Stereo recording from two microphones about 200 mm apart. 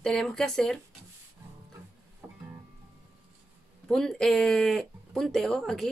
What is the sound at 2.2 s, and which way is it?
Music, 10° right (ahead or behind).